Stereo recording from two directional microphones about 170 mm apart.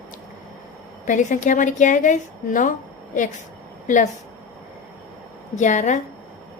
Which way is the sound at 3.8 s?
50° left (ahead or behind).